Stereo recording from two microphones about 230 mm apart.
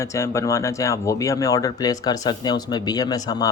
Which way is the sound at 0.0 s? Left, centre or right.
Centre.